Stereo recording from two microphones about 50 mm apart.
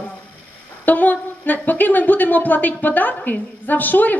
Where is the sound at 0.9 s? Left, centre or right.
Left.